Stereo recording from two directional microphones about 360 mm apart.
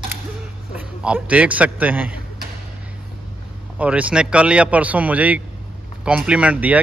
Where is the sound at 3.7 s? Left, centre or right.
Centre.